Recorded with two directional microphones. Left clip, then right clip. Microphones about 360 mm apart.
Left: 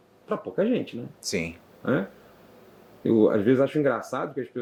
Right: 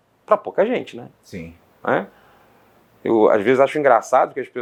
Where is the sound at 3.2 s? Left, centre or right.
Right.